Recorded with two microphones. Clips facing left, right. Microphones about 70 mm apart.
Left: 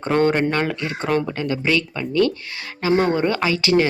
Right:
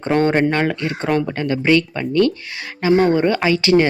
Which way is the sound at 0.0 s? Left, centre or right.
Right.